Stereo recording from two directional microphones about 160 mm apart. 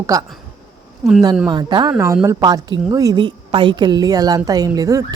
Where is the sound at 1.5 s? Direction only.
25° right (ahead or behind).